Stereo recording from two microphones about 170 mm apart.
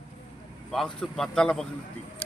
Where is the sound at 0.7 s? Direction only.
Centre (ahead or behind).